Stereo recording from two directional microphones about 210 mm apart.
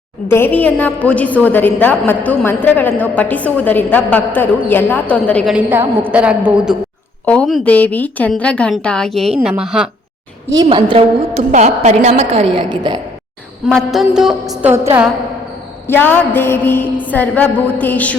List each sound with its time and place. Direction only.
0.3 s a woman's voice: 10° left (ahead or behind)
5.5 s a woman's voice: 10° right (ahead or behind)
10.5 s a woman's voice: 20° right (ahead or behind)
13.7 s a woman's voice: centre (ahead or behind)
15.9 s a woman's voice: 10° left (ahead or behind)